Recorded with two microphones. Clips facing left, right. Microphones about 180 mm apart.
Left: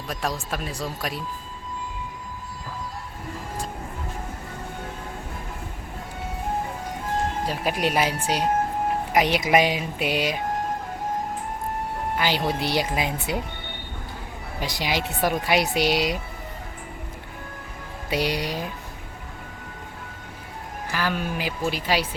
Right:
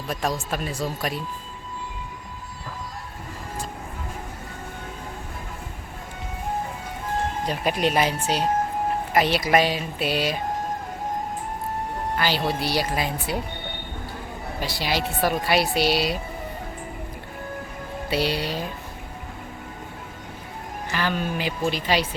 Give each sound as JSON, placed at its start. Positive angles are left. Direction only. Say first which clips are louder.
{"t": 0.1, "sound": "speech", "louder": "right 2 dB", "side_deg": 0}
{"t": 7.4, "sound": "speech", "louder": "right 1 dB", "side_deg": 5}
{"t": 12.1, "sound": "speech", "louder": "even", "side_deg": 15}
{"t": 14.6, "sound": "speech", "louder": "even", "side_deg": 15}
{"t": 18.1, "sound": "speech", "louder": "even", "side_deg": 15}
{"t": 20.9, "sound": "speech", "louder": "right 1 dB", "side_deg": 5}